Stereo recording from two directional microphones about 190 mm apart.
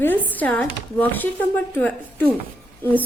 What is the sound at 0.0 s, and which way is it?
Speech, 10° left (ahead or behind).